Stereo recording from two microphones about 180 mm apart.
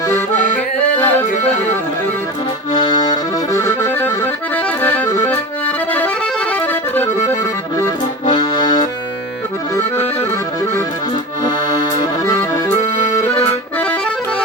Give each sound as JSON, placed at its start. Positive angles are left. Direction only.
{"t": 0.1, "sound": "accordion", "side_deg": 10}
{"t": 2.7, "sound": "accordion", "side_deg": 25}
{"t": 7.8, "sound": "accordion", "side_deg": 20}
{"t": 11.4, "sound": "accordion", "side_deg": 25}